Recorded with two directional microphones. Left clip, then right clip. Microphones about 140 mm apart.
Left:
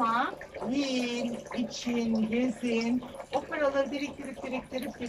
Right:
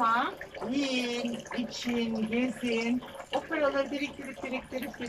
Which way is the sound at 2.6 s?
Centre (ahead or behind).